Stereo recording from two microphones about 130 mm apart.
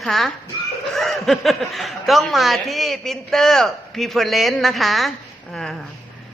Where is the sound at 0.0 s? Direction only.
Centre (ahead or behind).